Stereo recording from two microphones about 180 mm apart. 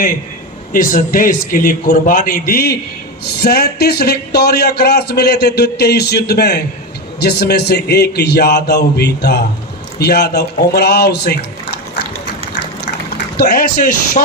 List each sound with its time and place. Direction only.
0.7 s a man's voice: 50° left (ahead or behind)
13.3 s a man's voice: 55° left (ahead or behind)